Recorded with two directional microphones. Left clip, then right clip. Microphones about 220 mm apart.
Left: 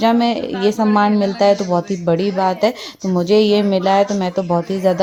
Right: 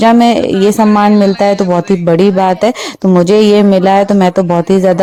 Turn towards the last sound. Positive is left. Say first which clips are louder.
# right 7 dB
turn(degrees=-40)  # may be behind; listen again after turning